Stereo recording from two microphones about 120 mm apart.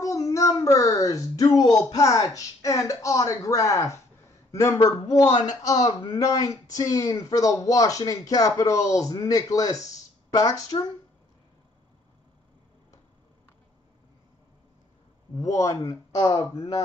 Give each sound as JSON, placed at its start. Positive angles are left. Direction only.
{"t": 0.0, "sound": "speech", "side_deg": 25}
{"t": 15.3, "sound": "speech", "side_deg": 30}
{"t": 16.5, "sound": "speech", "side_deg": 35}